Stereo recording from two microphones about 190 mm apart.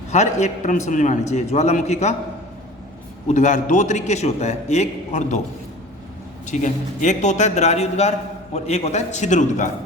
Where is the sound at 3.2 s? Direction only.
40° left (ahead or behind).